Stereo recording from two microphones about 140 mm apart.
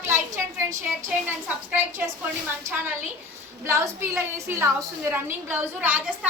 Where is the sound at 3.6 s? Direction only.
20° right (ahead or behind).